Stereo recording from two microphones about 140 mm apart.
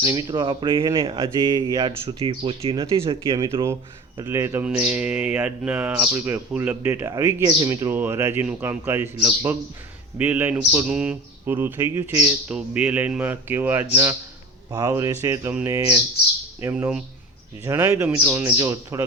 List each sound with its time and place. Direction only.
0.0 s speech: 25° right (ahead or behind)
3.2 s speech: 20° right (ahead or behind)
4.6 s speech: 10° right (ahead or behind)
12.5 s speech: 5° right (ahead or behind)